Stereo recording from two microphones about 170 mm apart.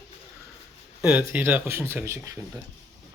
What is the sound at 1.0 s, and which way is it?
Speech, 10° right (ahead or behind).